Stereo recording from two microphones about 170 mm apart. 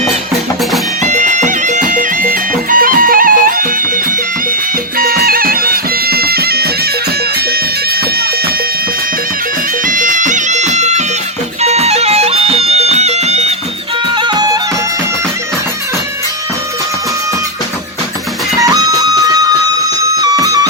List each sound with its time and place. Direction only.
1.0 s music: 45° right (ahead or behind)
4.9 s bagpipes: 60° right (ahead or behind)
9.8 s bagpipes: 50° right (ahead or behind)
11.6 s music: 40° right (ahead or behind)
14.2 s music: 25° right (ahead or behind)
18.6 s music: 20° right (ahead or behind)